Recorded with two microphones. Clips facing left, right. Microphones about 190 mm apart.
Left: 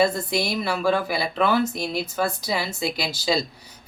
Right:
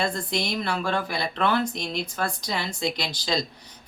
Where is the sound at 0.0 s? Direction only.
5° left (ahead or behind).